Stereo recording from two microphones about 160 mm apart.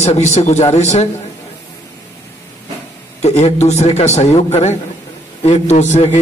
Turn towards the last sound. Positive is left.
turn(degrees=45)  # may be behind; listen again after turning